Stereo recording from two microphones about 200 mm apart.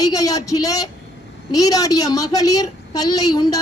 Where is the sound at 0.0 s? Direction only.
20° left (ahead or behind).